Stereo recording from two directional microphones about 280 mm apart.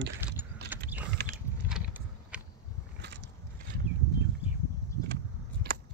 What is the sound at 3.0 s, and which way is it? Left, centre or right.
Biting, right.